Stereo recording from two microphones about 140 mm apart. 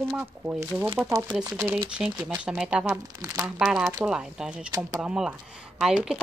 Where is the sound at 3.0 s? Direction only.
25° right (ahead or behind).